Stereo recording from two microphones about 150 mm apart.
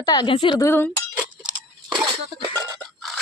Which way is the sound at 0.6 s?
15° left (ahead or behind).